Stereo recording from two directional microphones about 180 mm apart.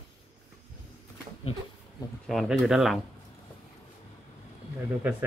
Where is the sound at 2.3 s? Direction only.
Centre (ahead or behind).